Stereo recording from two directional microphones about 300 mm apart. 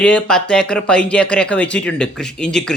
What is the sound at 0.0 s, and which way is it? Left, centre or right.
Speech, centre.